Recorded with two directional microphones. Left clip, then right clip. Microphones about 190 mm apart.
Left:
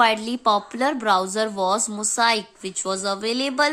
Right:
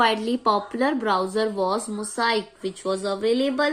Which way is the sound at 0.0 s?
20° left (ahead or behind).